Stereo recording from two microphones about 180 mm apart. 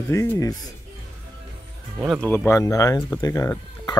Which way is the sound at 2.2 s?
10° left (ahead or behind).